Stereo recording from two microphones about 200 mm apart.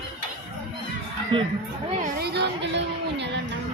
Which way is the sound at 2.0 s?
55° right (ahead or behind).